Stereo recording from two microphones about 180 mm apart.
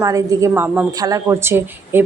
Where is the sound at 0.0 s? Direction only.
20° right (ahead or behind).